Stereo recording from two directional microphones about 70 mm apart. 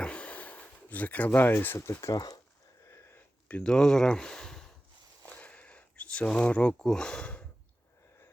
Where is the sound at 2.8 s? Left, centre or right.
Left.